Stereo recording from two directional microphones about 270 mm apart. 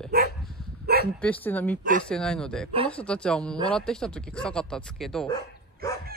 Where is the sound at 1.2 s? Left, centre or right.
Centre.